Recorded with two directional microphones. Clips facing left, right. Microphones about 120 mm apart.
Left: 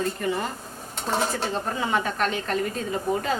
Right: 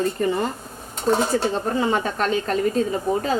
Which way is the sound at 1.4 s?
35° right (ahead or behind).